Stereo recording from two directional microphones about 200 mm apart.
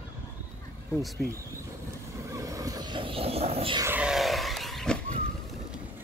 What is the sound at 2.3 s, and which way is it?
Vehicle, 15° right (ahead or behind).